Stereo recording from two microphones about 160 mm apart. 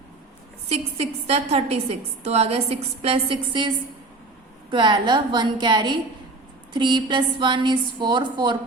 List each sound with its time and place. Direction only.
0.7 s a woman's voice: 40° right (ahead or behind)
4.7 s a woman's voice: 30° right (ahead or behind)